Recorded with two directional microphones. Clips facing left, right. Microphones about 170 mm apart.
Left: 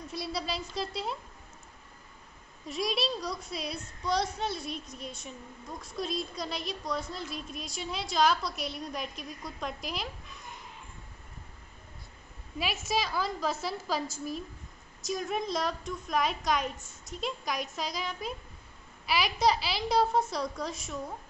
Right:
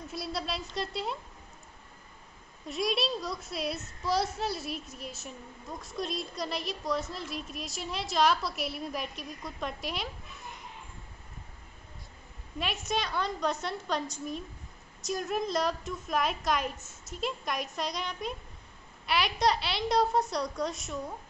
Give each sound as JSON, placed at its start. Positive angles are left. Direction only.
{"t": 0.1, "sound": "a woman's voice", "side_deg": 0}
{"t": 2.6, "sound": "a woman's voice", "side_deg": 0}
{"t": 12.5, "sound": "a woman's voice", "side_deg": 5}